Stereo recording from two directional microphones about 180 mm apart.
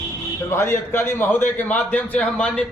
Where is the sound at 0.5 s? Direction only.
15° left (ahead or behind).